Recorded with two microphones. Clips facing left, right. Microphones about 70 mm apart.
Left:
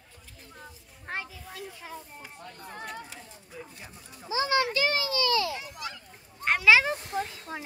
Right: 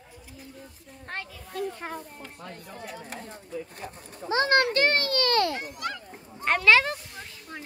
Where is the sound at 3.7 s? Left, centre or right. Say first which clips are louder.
Right 7 dB; right.